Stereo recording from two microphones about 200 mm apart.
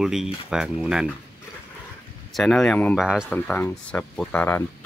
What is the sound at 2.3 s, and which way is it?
Speech, centre (ahead or behind).